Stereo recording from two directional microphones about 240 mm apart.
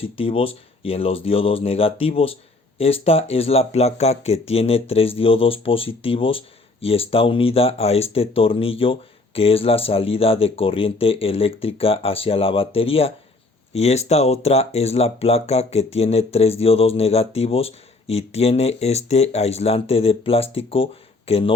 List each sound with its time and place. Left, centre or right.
0.0 s speech: left